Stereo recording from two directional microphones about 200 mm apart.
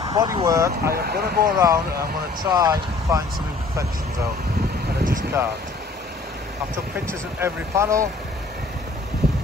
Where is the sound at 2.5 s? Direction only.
20° right (ahead or behind).